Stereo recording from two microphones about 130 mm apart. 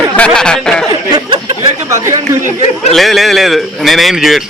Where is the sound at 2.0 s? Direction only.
25° right (ahead or behind).